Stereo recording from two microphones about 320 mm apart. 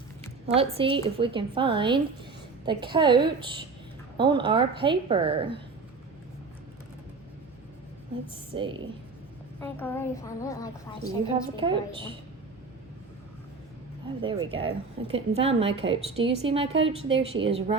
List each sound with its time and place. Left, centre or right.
0.5 s a woman's voice: centre
8.5 s a woman's voice: centre
9.6 s a woman's voice: centre
11.5 s a woman's voice: centre
14.2 s a woman's voice: centre